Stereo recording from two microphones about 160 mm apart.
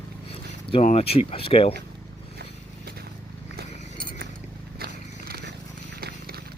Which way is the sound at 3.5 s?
65° right (ahead or behind).